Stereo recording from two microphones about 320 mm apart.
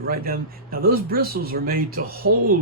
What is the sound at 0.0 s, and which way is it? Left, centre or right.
Speech, right.